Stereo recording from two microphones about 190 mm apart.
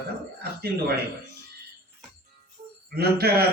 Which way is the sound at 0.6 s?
55° right (ahead or behind).